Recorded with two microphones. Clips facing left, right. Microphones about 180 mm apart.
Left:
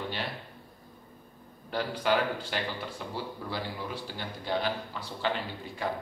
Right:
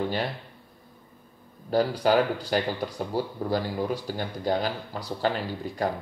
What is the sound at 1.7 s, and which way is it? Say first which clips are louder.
Speech: right 6 dB; 40° right (ahead or behind).